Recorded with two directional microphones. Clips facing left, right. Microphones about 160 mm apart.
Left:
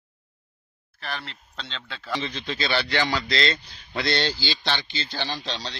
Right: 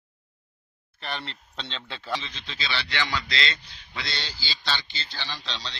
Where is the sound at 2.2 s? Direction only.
55° left (ahead or behind).